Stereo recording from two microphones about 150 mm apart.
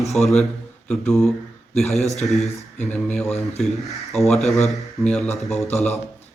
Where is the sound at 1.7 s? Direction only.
Centre (ahead or behind).